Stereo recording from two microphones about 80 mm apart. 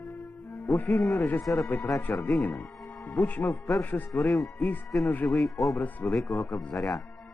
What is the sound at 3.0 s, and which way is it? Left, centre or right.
A man's voice, left.